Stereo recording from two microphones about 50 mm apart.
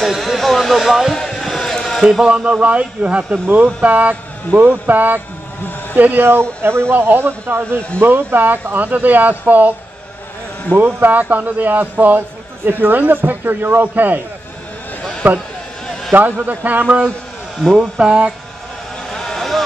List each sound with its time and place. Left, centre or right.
0.0 s a sound: centre
2.0 s speech: centre; by 6.2 s right
6.2 s speech: right
6.9 s speech: right
15.2 s speech: right
17.7 s speech: centre
19.0 s vehicle: centre